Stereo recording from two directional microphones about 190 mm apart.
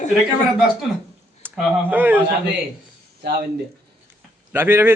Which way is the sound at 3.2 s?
60° right (ahead or behind).